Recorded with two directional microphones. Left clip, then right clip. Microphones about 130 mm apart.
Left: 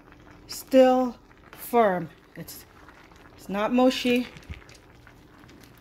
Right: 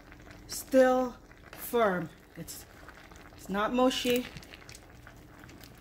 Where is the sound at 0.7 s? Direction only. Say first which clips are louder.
Left 5 dB; 50° left (ahead or behind).